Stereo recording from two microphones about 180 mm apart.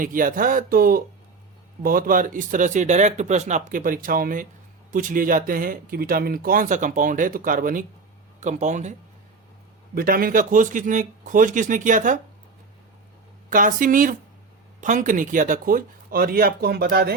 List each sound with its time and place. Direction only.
0.0 s speech: 50° right (ahead or behind)
9.9 s speech: 55° right (ahead or behind)
13.5 s speech: 50° right (ahead or behind)